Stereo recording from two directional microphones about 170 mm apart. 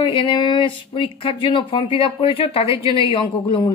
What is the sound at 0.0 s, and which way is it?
A woman's voice, 30° left (ahead or behind).